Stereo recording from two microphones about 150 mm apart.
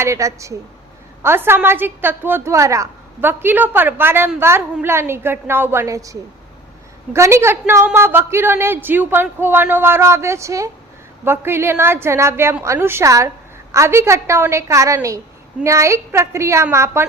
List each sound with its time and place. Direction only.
0.0 s a woman's voice: 20° right (ahead or behind)